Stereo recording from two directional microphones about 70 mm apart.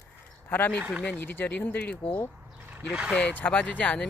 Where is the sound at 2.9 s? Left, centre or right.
Centre.